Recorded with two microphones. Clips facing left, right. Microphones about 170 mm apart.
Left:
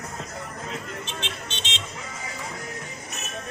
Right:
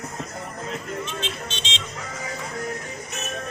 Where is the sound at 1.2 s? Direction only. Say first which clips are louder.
Right 3 dB; 55° left (ahead or behind).